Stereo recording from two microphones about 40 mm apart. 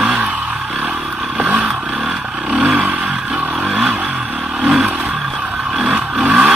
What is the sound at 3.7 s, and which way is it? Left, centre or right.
Vehicle, centre.